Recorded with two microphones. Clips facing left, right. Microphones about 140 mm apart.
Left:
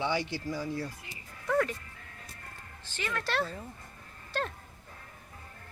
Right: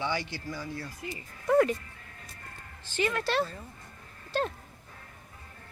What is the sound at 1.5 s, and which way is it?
Music, 20° right (ahead or behind).